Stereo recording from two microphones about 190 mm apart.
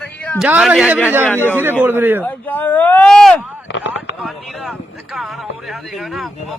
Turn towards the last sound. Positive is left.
turn(degrees=0)  # may be behind; listen again after turning